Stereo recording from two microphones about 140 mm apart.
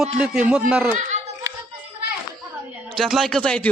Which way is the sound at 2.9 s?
Centre (ahead or behind).